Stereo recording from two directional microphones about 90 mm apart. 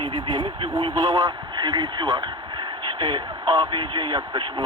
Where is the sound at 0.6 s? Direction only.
75° right (ahead or behind).